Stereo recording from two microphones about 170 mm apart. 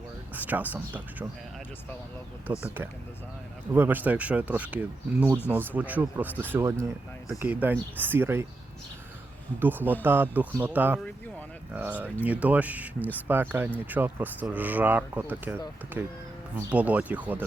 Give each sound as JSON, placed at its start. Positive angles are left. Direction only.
{"t": 0.3, "sound": "speech", "side_deg": -10}
{"t": 2.5, "sound": "speech", "side_deg": -25}
{"t": 3.7, "sound": "speech", "side_deg": -10}
{"t": 9.6, "sound": "speech", "side_deg": -10}